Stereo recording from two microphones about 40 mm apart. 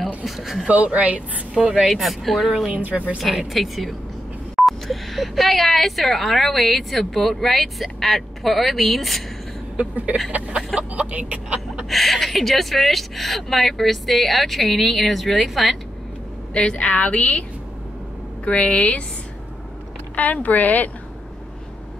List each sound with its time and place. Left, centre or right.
0.2 s speech: centre
0.8 s a woman's voice: right
1.5 s speech: centre
1.9 s speech: centre
2.7 s a woman's voice: right
3.5 s speech: centre
10.5 s speech: right
11.9 s speech: centre
16.5 s a woman's voice: left
16.9 s a woman's voice: left
20.2 s speech: left